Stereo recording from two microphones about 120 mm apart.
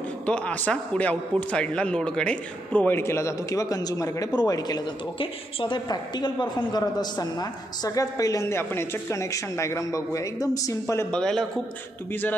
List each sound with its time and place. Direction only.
0.2 s a man's voice: 10° left (ahead or behind); by 4.8 s 35° left (ahead or behind)
5.2 s a man's voice: 45° left (ahead or behind); by 11.1 s 25° left (ahead or behind)
11.1 s a man's voice: 5° left (ahead or behind)